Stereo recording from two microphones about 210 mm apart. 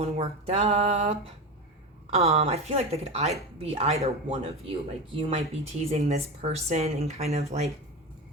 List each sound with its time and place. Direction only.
0.0 s speech: 30° right (ahead or behind)